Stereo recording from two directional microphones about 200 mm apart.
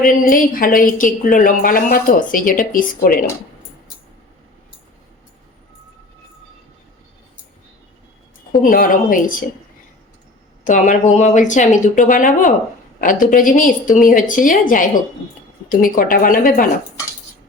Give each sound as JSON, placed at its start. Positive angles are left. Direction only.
{"t": 0.0, "sound": "a woman's voice", "side_deg": 45}
{"t": 8.6, "sound": "a woman's voice", "side_deg": 45}
{"t": 10.7, "sound": "a woman's voice", "side_deg": 40}